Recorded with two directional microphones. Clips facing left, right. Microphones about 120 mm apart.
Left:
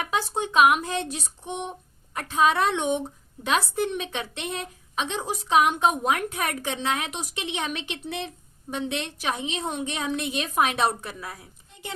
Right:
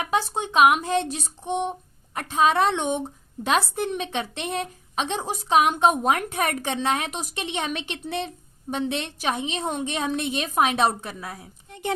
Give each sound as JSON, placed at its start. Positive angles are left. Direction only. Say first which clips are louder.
{"t": 0.4, "sound": "a woman's voice", "louder": "right 1 dB", "side_deg": -35}
{"t": 6.1, "sound": "a woman's voice", "louder": "right 3 dB", "side_deg": -40}
{"t": 11.7, "sound": "a sound", "louder": "right 10 dB", "side_deg": -60}